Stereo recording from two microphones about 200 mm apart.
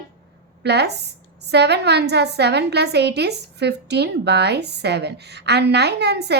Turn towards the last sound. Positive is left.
turn(degrees=-55)  # may be behind; listen again after turning